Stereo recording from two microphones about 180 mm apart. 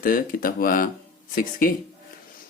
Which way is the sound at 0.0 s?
50° left (ahead or behind).